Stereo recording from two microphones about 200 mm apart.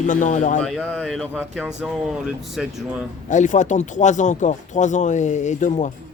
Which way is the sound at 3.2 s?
40° left (ahead or behind).